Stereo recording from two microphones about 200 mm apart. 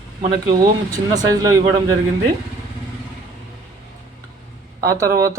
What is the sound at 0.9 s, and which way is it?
Speech, 20° right (ahead or behind).